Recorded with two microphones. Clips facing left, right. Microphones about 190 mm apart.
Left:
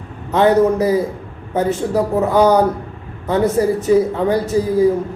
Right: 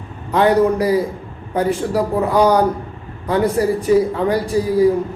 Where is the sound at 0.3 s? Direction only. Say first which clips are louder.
Left 1 dB; 25° left (ahead or behind).